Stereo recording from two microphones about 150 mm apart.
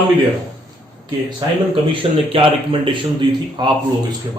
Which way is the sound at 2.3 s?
35° right (ahead or behind).